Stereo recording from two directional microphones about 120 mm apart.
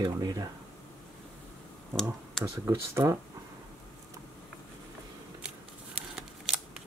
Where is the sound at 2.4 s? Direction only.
20° right (ahead or behind).